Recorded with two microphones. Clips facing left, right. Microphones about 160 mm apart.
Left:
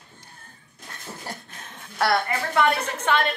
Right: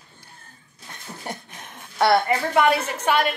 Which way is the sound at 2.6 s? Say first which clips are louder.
Right 2 dB; 15° right (ahead or behind).